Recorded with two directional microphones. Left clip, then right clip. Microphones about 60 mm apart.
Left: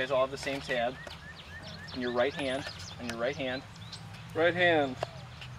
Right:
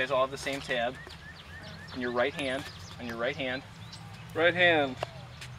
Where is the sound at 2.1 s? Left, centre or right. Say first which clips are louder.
Even; centre.